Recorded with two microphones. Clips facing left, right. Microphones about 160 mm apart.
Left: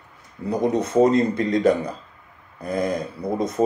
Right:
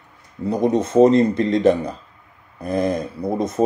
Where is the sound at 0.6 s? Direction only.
20° right (ahead or behind).